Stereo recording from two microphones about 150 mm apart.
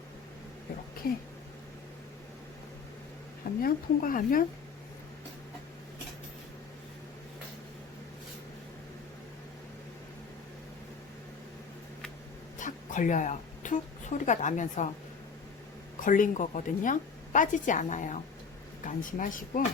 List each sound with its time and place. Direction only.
3.6 s a woman's voice: 65° left (ahead or behind)
12.5 s a woman's voice: 60° left (ahead or behind)
16.0 s a woman's voice: 60° left (ahead or behind)